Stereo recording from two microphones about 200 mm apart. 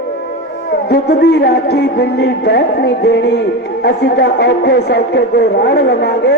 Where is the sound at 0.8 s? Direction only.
55° left (ahead or behind).